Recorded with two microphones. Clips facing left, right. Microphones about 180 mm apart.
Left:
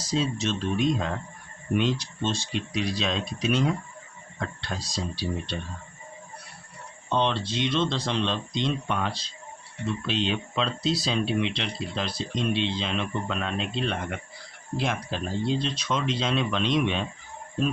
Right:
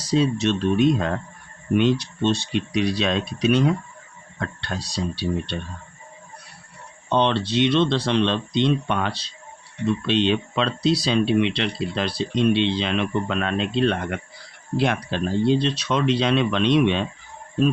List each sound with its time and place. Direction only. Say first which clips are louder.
0.0 s speech: right 7 dB; 65° right (ahead or behind)
7.1 s speech: right 5 dB; 70° right (ahead or behind)